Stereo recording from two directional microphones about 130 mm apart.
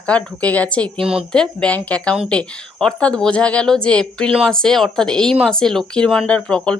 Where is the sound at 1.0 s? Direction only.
5° right (ahead or behind).